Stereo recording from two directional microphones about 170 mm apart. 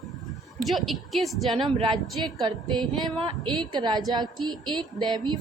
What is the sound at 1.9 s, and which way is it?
A woman's voice, 30° right (ahead or behind).